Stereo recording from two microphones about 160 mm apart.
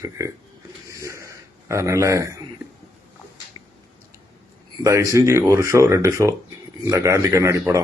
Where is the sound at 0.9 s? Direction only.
20° right (ahead or behind).